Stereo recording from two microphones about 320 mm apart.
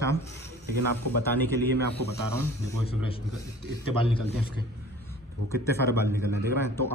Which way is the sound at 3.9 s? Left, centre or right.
Centre.